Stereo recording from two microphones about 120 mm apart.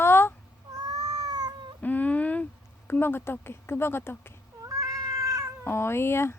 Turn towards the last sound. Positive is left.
turn(degrees=20)  # may be behind; listen again after turning